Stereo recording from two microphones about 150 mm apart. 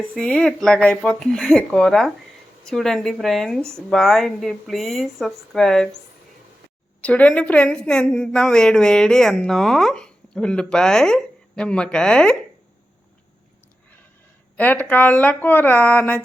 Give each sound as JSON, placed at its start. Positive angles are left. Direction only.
{"t": 0.1, "sound": "speech", "side_deg": 5}
{"t": 3.6, "sound": "speech", "side_deg": -20}
{"t": 3.8, "sound": "speech", "side_deg": 0}
{"t": 7.0, "sound": "speech", "side_deg": 10}
{"t": 14.5, "sound": "a woman's voice", "side_deg": 10}